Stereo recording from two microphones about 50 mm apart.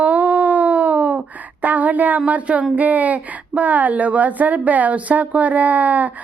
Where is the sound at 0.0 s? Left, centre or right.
Right.